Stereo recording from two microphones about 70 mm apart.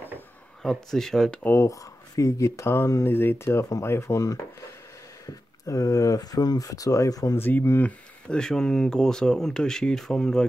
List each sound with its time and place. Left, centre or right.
0.6 s speech: centre
1.4 s speech: left
1.7 s speech: left
5.2 s speech: left
7.3 s speech: left
7.8 s speech: centre